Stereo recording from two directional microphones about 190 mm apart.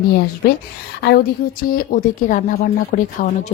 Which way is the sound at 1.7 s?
45° left (ahead or behind).